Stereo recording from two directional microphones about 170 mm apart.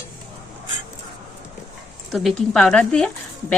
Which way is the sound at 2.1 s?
Centre (ahead or behind).